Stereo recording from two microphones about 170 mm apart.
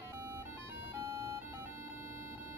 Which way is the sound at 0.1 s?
15° right (ahead or behind).